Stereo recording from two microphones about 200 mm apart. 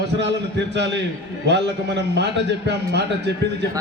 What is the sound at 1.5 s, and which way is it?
A man's voice, 60° right (ahead or behind).